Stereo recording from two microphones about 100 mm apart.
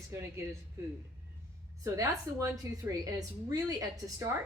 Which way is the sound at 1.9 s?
30° right (ahead or behind).